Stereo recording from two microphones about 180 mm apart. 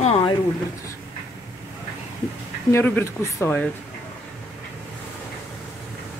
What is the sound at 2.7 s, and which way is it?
Speech, 15° left (ahead or behind).